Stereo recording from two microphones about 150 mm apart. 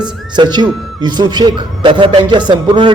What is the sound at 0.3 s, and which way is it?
A man's voice, 30° right (ahead or behind).